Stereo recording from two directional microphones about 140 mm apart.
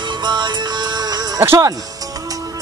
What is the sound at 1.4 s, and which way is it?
Speech, 15° right (ahead or behind).